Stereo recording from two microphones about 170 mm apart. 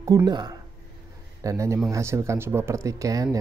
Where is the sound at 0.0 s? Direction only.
25° right (ahead or behind).